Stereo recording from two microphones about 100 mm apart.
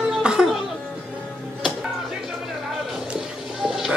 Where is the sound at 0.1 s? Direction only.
5° right (ahead or behind).